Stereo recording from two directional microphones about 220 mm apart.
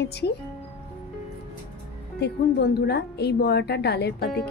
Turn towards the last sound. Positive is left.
turn(degrees=50)  # may be behind; listen again after turning